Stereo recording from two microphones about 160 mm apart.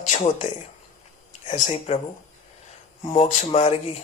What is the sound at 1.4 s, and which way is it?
Speech, 50° left (ahead or behind).